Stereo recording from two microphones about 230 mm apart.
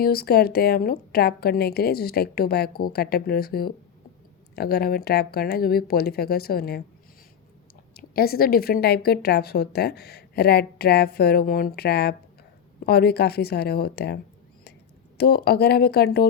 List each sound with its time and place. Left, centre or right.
0.0 s speech: left
8.1 s speech: left
15.2 s speech: left